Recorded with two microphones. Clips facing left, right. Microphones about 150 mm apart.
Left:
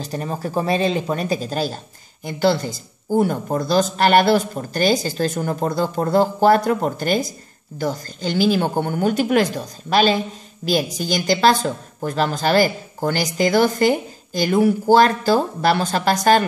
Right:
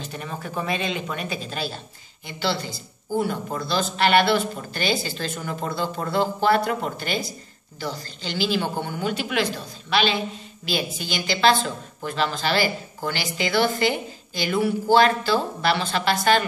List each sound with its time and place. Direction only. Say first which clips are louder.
0.0 s a woman's voice: left 7 dB; 35° left (ahead or behind)